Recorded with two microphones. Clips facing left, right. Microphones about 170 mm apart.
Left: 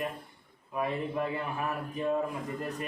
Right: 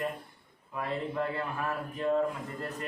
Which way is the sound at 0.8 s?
15° left (ahead or behind).